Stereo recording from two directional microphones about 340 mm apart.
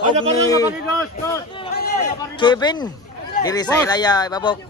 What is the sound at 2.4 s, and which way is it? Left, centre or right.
Speech, centre.